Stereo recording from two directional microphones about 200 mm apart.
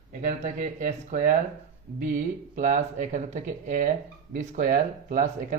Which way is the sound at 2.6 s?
35° right (ahead or behind).